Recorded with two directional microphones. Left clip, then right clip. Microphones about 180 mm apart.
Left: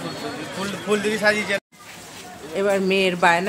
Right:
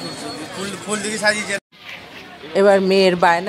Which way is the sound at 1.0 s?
55° left (ahead or behind).